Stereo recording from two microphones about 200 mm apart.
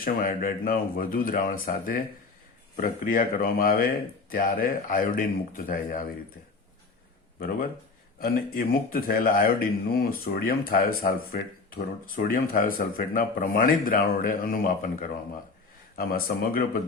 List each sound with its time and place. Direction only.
0.0 s speech: 45° left (ahead or behind)
7.3 s speech: 45° left (ahead or behind)